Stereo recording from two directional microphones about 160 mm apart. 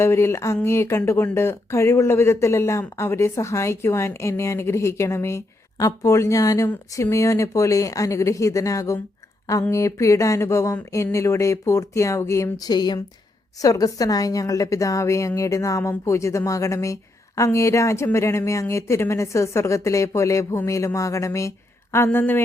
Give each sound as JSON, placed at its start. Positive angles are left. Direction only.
{"t": 0.0, "sound": "a woman's voice", "side_deg": 15}